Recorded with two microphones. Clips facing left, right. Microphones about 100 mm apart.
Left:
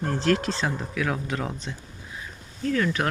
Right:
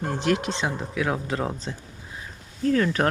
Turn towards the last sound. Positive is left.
turn(degrees=-35)  # may be behind; listen again after turning